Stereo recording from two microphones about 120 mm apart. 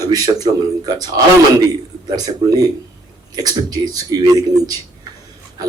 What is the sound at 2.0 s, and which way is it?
A man's voice, 30° right (ahead or behind).